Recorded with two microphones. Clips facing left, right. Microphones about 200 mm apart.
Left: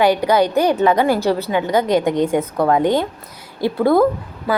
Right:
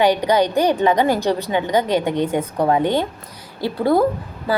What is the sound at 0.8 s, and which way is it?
A woman's voice, 15° right (ahead or behind).